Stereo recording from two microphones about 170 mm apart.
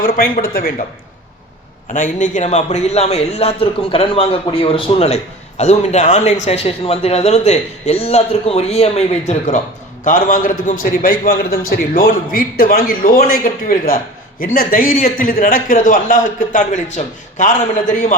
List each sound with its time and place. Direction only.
0.0 s a man's voice: 60° left (ahead or behind)
1.9 s a man's voice: 50° left (ahead or behind)